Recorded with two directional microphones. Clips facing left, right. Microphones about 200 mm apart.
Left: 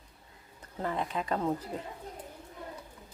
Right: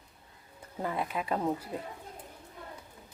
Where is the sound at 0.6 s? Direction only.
10° right (ahead or behind).